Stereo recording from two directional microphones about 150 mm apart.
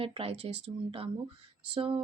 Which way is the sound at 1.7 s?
35° right (ahead or behind).